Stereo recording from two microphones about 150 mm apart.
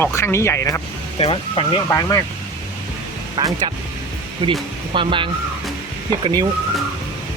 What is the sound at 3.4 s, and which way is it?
Speech, 30° right (ahead or behind).